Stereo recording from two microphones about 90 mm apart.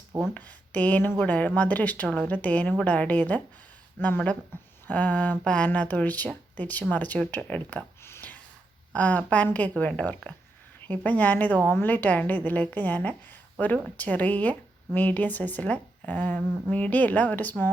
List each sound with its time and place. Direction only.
0.3 s a woman's voice: 20° left (ahead or behind)
8.1 s a sound: 20° left (ahead or behind)
8.9 s a woman's voice: 15° left (ahead or behind)